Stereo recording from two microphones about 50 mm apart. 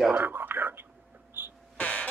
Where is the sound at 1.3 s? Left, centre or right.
Right.